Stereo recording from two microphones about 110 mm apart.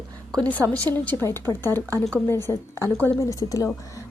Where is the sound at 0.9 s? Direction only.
20° left (ahead or behind).